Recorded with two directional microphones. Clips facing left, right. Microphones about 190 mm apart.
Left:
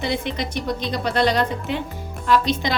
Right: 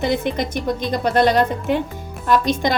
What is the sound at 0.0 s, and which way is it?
A woman's voice, 50° right (ahead or behind).